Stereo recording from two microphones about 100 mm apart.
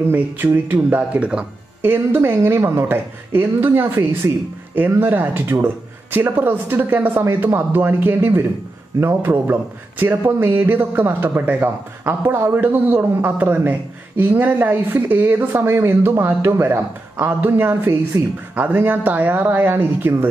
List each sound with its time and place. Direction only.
0.1 s a man's voice: 20° right (ahead or behind)